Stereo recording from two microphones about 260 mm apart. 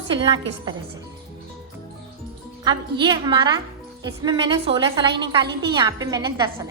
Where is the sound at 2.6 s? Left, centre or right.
Centre.